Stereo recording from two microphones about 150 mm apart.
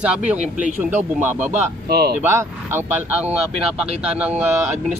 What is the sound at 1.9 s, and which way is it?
Speech, 90° right.